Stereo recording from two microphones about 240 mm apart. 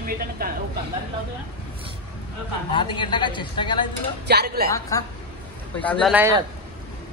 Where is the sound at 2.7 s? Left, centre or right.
Centre.